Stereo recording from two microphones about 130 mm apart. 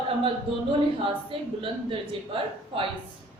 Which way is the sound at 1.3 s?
45° right (ahead or behind).